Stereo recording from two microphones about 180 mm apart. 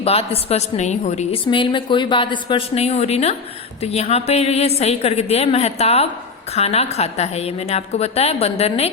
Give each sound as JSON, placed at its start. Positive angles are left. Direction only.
{"t": 0.0, "sound": "a woman's voice", "side_deg": 35}